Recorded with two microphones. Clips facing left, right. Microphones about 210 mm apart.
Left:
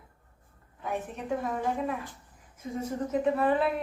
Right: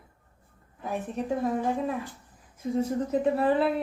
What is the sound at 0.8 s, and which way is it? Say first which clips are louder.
A woman's voice: right 3 dB; 35° right (ahead or behind).